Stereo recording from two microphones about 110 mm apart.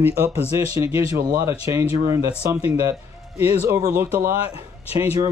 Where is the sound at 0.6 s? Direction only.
25° right (ahead or behind).